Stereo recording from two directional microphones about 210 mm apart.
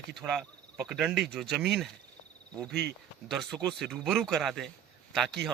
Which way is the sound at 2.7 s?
50° right (ahead or behind).